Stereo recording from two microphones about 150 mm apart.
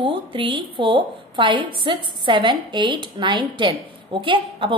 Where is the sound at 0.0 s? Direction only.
35° right (ahead or behind).